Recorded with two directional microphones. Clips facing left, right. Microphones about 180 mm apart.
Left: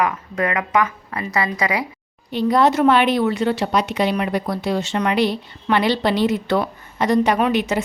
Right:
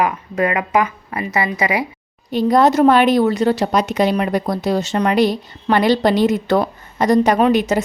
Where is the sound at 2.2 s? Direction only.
40° right (ahead or behind).